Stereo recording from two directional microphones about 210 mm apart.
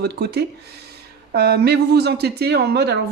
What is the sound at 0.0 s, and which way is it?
Speech, 50° right (ahead or behind).